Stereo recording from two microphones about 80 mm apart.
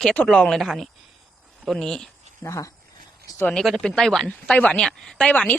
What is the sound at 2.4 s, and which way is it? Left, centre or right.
Speech, left.